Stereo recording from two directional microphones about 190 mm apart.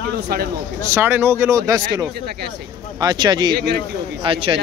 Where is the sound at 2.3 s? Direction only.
55° right (ahead or behind).